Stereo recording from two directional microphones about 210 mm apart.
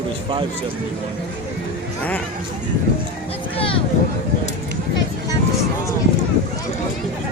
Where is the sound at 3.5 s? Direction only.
25° left (ahead or behind).